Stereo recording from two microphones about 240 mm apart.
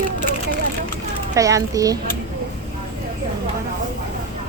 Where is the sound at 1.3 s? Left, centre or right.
Centre.